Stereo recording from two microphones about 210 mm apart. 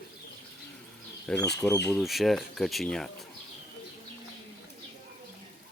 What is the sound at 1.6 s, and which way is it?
Speech, 10° left (ahead or behind).